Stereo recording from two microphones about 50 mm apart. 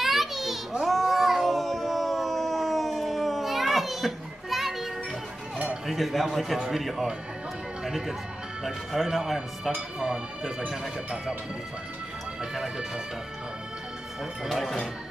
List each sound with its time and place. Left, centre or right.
0.0 s children playing: centre
0.8 s cat: centre
5.9 s speech: centre
8.6 s speech: centre
12.4 s speech: centre
14.5 s speech: centre